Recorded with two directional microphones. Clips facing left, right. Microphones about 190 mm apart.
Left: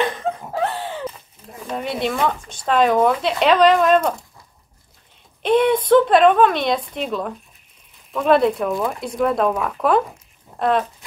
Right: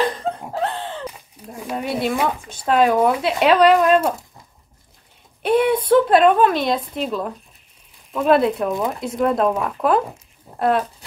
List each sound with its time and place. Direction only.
0.2 s a sound: 10° left (ahead or behind)
1.7 s speech: 5° right (ahead or behind)
5.4 s speech: 10° right (ahead or behind)
8.6 s speech: 20° right (ahead or behind)
9.0 s speech: centre (ahead or behind)